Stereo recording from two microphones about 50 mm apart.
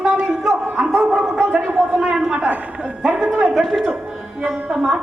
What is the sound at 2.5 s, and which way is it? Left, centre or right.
A woman's voice, right.